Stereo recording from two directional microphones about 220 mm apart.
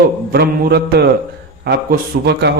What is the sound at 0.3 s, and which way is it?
A man's voice, 45° right (ahead or behind).